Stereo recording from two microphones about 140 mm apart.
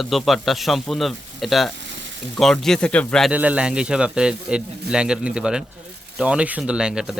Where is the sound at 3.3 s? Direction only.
10° right (ahead or behind).